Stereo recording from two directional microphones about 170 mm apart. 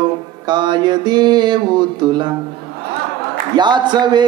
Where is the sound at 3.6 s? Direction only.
25° right (ahead or behind).